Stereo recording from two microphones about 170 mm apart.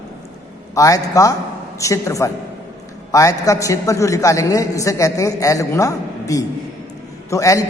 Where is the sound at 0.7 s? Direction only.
20° left (ahead or behind).